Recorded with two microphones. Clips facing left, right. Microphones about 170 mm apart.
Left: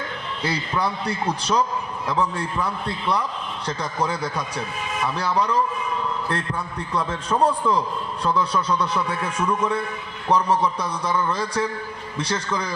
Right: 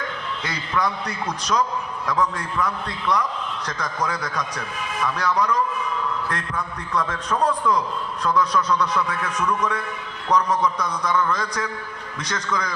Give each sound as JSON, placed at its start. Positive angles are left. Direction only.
{"t": 0.4, "sound": "a man's voice", "side_deg": 30}